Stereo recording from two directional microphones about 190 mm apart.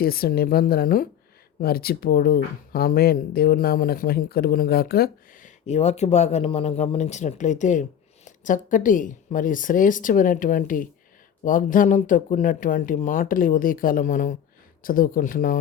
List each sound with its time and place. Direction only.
0.0 s speech: 55° left (ahead or behind)
5.6 s speech: 35° left (ahead or behind)